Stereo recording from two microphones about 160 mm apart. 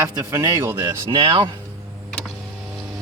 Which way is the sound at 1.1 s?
35° right (ahead or behind).